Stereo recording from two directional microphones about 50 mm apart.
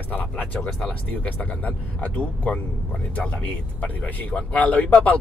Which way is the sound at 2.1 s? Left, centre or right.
Left.